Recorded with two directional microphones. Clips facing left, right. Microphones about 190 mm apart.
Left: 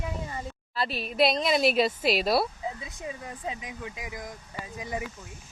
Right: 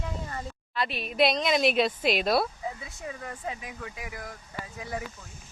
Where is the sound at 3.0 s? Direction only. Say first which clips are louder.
Even; 20° left (ahead or behind).